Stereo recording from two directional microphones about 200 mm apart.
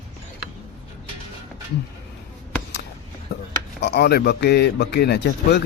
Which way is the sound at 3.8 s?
55° left (ahead or behind).